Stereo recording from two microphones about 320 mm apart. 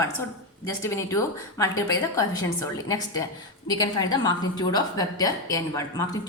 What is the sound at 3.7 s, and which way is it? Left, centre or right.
A woman's voice, centre.